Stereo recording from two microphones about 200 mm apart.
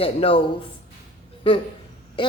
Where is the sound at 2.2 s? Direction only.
25° left (ahead or behind).